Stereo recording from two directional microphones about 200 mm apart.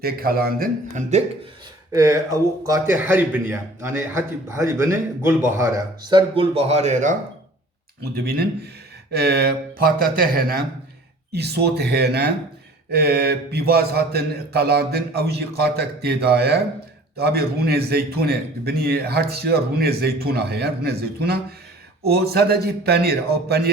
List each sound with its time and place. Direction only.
0.0 s a man's voice: 50° right (ahead or behind)
1.9 s a man's voice: 15° right (ahead or behind); by 7.2 s 35° right (ahead or behind)
8.1 s a man's voice: 50° right (ahead or behind)